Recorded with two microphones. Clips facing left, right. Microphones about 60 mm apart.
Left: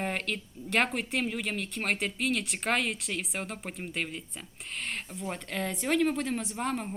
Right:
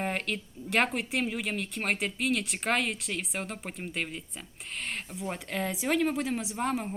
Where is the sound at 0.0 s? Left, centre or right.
Centre.